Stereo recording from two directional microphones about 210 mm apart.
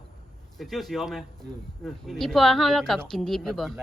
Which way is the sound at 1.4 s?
55° right (ahead or behind).